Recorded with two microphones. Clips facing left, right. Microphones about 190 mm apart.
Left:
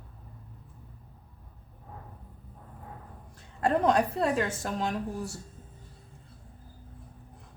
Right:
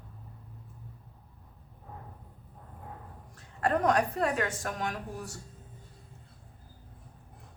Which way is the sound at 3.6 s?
25° left (ahead or behind).